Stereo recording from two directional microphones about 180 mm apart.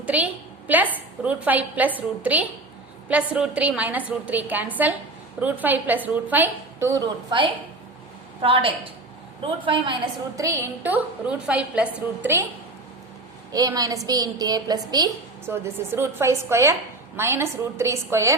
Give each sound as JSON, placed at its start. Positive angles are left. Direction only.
{"t": 0.0, "sound": "a sound", "side_deg": -5}
{"t": 0.7, "sound": "a woman's voice", "side_deg": -10}
{"t": 10.3, "sound": "a woman's voice", "side_deg": -15}
{"t": 13.5, "sound": "a woman's voice", "side_deg": -20}